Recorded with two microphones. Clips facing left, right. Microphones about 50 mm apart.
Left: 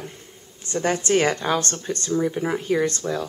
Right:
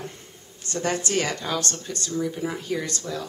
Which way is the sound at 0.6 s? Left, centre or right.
Left.